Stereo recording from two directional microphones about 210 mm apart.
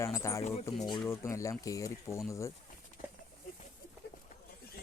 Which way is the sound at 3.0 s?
40° left (ahead or behind).